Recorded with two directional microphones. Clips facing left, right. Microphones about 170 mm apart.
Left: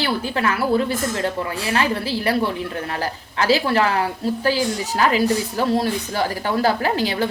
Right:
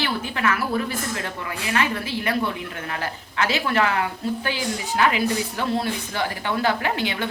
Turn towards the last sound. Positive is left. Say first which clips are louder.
# left 4 dB
turn(degrees=35)  # may be behind; listen again after turning